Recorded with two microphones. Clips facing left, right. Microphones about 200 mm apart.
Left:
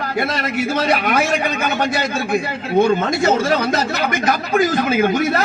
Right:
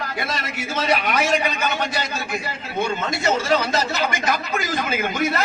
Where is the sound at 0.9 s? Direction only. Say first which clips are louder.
Right 1 dB; 55° left (ahead or behind).